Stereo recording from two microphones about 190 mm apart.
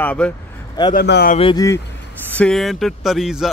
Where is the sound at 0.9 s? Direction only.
55° left (ahead or behind).